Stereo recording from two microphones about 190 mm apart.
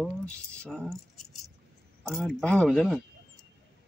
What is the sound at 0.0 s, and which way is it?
Speech, 5° left (ahead or behind).